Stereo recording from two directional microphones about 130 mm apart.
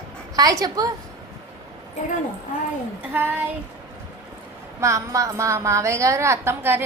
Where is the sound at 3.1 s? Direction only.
15° right (ahead or behind).